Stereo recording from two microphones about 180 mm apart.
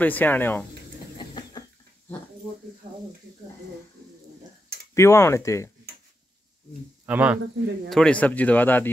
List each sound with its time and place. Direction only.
0.0 s speech: 10° left (ahead or behind)
1.1 s a sound: 25° left (ahead or behind)
4.9 s speech: 15° left (ahead or behind)
7.1 s speech: 10° right (ahead or behind)
7.9 s speech: 5° left (ahead or behind)